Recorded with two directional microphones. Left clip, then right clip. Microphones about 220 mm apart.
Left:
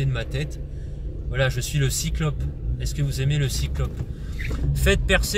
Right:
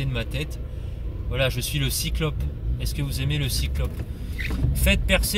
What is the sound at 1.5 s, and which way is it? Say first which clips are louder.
Speech: even; 35° left (ahead or behind).